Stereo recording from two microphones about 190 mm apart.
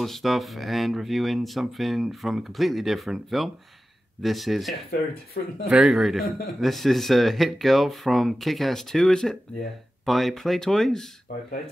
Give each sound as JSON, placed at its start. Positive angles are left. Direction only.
{"t": 0.0, "sound": "speech", "side_deg": 0}
{"t": 5.4, "sound": "speech", "side_deg": 50}
{"t": 5.7, "sound": "speech", "side_deg": -5}